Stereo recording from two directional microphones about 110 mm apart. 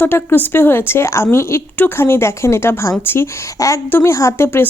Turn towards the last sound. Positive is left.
turn(degrees=20)  # may be behind; listen again after turning